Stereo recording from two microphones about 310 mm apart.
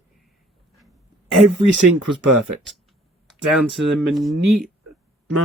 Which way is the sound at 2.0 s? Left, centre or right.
Right.